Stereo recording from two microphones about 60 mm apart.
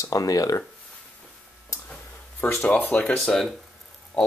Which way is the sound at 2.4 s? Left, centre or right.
Left.